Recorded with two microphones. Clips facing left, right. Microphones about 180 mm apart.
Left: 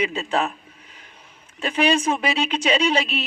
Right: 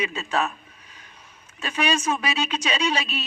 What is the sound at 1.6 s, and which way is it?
A woman's voice, 25° left (ahead or behind).